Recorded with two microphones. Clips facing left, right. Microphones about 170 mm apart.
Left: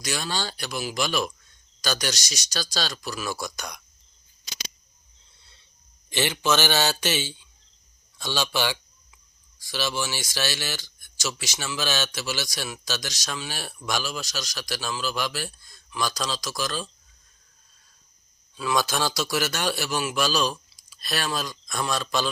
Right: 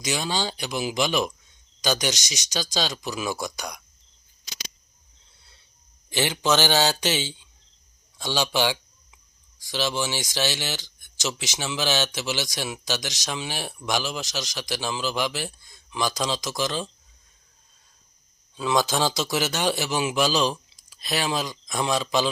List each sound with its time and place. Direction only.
0.0 s speech: 15° right (ahead or behind)
6.1 s speech: 15° right (ahead or behind)
18.5 s speech: 20° right (ahead or behind)